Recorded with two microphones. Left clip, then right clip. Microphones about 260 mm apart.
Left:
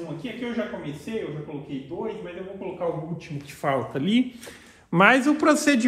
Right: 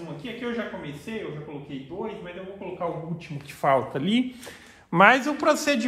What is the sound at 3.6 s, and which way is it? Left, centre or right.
A man's voice, right.